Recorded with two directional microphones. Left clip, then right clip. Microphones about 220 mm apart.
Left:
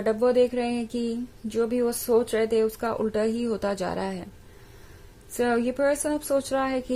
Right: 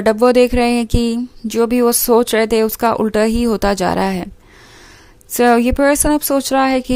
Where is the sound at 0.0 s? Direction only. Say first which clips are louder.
Right 10 dB; 40° right (ahead or behind).